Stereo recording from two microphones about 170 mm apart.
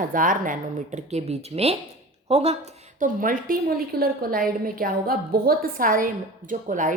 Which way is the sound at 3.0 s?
55° right (ahead or behind).